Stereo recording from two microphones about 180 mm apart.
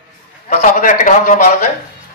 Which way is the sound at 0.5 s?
45° left (ahead or behind).